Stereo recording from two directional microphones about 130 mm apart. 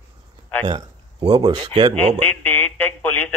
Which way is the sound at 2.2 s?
15° left (ahead or behind).